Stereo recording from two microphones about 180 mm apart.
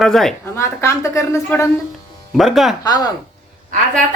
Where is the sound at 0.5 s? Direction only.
15° left (ahead or behind).